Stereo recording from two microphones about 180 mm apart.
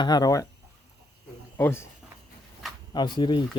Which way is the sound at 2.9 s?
25° left (ahead or behind).